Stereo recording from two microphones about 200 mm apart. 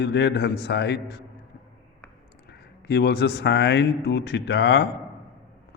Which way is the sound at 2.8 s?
55° left (ahead or behind).